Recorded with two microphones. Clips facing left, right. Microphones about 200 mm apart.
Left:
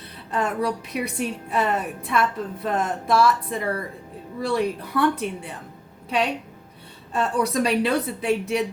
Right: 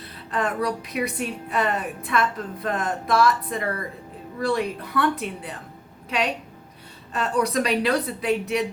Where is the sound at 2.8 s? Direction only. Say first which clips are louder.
Left 1 dB; 25° left (ahead or behind).